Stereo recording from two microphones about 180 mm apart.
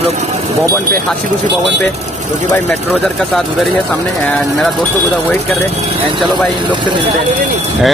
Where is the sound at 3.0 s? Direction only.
Centre (ahead or behind).